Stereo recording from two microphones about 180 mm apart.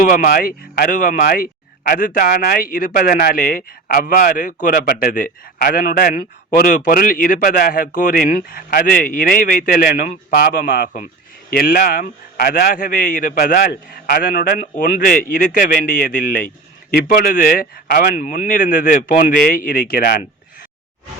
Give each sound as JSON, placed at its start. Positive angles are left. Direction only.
{"t": 0.0, "sound": "a man's voice", "side_deg": 50}